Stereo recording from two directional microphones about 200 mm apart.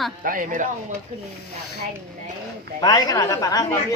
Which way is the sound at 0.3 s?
40° right (ahead or behind).